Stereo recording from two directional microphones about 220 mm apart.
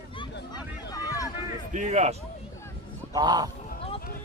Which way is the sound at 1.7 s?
35° right (ahead or behind).